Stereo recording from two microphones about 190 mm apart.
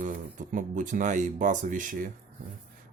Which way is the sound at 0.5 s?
40° right (ahead or behind).